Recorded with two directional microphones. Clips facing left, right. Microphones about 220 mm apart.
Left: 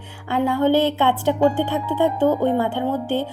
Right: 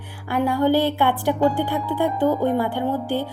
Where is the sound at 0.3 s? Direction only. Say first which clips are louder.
Left 1 dB; 20° left (ahead or behind).